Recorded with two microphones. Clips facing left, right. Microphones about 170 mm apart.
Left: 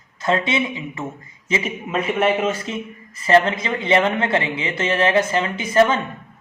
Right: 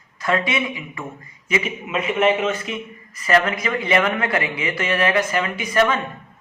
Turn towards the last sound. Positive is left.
turn(degrees=25)  # may be behind; listen again after turning